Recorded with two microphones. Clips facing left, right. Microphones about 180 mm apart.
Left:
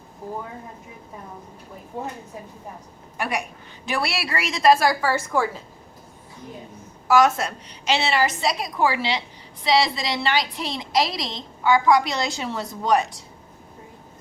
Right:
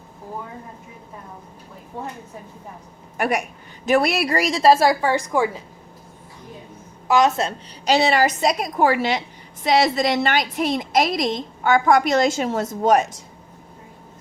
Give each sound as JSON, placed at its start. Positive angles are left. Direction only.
{"t": 1.9, "sound": "a woman's voice", "side_deg": 15}
{"t": 3.2, "sound": "a woman's voice", "side_deg": -45}
{"t": 7.1, "sound": "a woman's voice", "side_deg": -20}
{"t": 7.9, "sound": "a woman's voice", "side_deg": -40}